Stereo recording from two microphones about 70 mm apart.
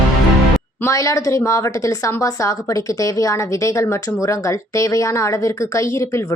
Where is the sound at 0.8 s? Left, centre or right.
Left.